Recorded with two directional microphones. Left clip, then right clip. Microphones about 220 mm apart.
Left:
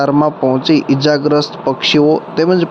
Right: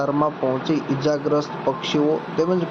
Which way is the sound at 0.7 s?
45° left (ahead or behind).